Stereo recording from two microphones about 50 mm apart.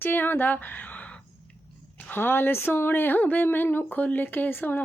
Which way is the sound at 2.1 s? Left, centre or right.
Left.